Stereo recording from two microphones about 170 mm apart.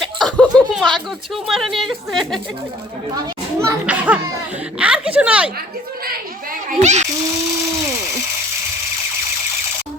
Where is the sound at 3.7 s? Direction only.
10° right (ahead or behind).